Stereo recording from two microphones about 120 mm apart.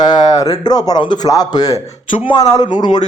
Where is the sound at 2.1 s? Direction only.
45° left (ahead or behind).